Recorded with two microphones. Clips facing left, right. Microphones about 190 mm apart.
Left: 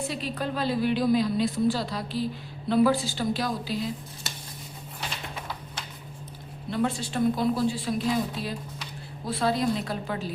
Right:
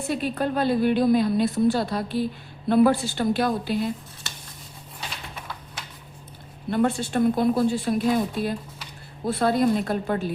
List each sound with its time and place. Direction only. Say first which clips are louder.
0.1 s a woman's voice: right 6 dB; 55° right (ahead or behind)
6.7 s a woman's voice: right 5 dB; 55° right (ahead or behind)